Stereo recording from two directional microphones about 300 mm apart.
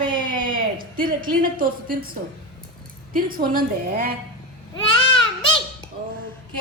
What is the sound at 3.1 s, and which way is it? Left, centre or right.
A woman's voice, right.